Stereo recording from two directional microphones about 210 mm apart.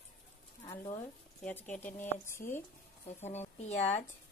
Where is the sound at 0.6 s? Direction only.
20° left (ahead or behind).